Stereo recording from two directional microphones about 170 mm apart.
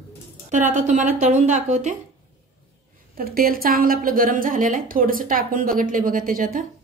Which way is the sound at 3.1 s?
60° right (ahead or behind).